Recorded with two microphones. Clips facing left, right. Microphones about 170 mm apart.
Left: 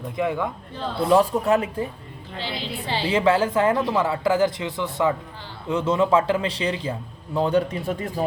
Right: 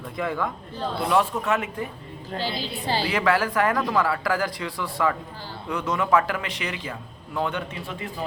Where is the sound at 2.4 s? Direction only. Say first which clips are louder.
Even; 40° right (ahead or behind).